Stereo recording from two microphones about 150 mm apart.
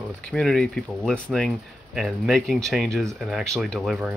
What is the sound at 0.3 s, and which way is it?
Speech, centre (ahead or behind).